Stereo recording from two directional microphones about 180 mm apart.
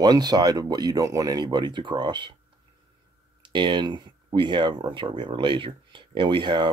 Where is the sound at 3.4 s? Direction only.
25° right (ahead or behind).